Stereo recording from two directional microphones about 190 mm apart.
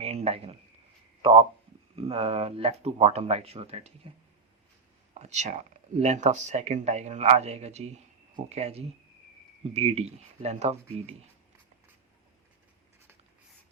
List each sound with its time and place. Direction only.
0.0 s a sound: 30° right (ahead or behind)
1.2 s speech: 30° right (ahead or behind)
5.1 s speech: 35° right (ahead or behind)